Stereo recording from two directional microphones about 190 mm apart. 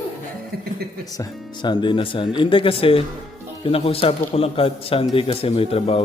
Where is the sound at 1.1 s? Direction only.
20° left (ahead or behind).